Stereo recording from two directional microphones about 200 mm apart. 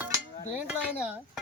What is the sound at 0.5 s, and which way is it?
Dishes, 5° right (ahead or behind).